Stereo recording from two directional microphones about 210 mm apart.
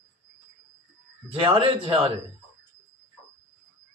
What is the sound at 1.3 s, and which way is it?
Speech, 25° right (ahead or behind).